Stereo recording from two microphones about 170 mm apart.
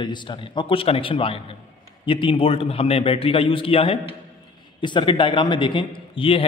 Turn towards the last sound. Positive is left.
turn(degrees=30)  # may be behind; listen again after turning